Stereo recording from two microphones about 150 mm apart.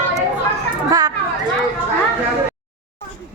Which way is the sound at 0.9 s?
25° right (ahead or behind).